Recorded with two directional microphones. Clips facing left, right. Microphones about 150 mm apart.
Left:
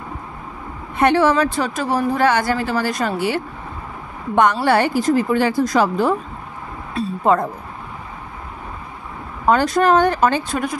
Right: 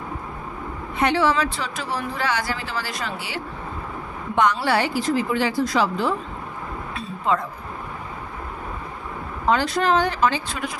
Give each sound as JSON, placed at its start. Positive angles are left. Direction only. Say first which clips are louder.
{"t": 0.9, "sound": "speech", "louder": "left 5 dB", "side_deg": 50}
{"t": 4.4, "sound": "speech", "louder": "left 5 dB", "side_deg": 50}
{"t": 6.9, "sound": "a sound", "louder": "left 7 dB", "side_deg": 40}
{"t": 9.5, "sound": "speech", "louder": "left 5 dB", "side_deg": 45}